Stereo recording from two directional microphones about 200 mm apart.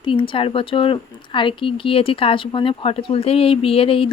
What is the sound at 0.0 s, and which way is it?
Speech, 25° left (ahead or behind).